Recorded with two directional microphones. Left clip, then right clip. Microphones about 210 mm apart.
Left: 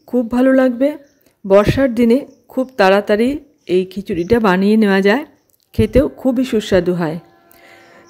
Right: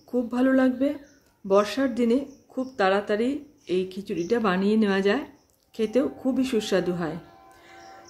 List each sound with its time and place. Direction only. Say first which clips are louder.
0.0 s a woman's voice: left 10 dB; 35° left (ahead or behind)